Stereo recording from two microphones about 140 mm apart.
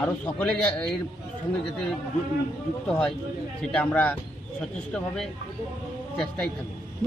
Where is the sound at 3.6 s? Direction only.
10° left (ahead or behind).